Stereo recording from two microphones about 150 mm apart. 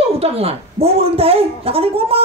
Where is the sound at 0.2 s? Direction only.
40° right (ahead or behind).